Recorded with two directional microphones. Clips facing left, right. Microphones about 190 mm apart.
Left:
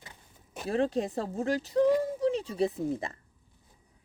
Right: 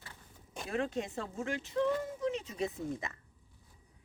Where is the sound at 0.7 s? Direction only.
35° left (ahead or behind).